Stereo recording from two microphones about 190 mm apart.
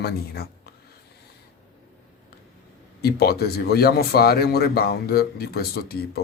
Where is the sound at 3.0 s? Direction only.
55° left (ahead or behind).